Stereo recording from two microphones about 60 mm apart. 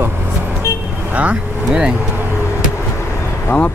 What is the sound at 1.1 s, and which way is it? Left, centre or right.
Speech, right.